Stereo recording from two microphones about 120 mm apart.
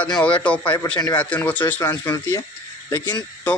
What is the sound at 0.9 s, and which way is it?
Speech, 35° left (ahead or behind).